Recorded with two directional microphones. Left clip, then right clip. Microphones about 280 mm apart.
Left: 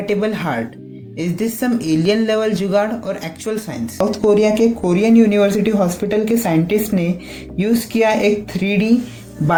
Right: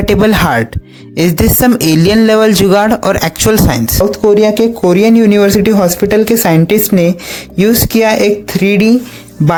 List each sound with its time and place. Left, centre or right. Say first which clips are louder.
0.0 s speech: right 10 dB; right